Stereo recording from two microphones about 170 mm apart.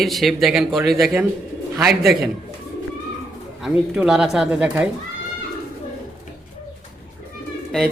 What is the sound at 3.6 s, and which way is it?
A man's voice, 5° right (ahead or behind).